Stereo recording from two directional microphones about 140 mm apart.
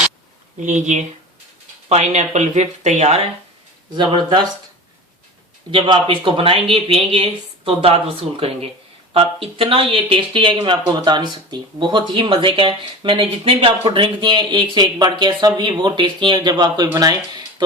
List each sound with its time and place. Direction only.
0.6 s speech: 60° right (ahead or behind)
3.9 s speech: 35° right (ahead or behind)
5.7 s speech: 35° right (ahead or behind)